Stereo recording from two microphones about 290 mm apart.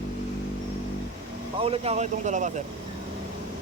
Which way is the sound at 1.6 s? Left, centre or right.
Right.